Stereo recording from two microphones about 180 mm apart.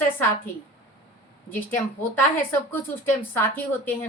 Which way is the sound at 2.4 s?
10° left (ahead or behind).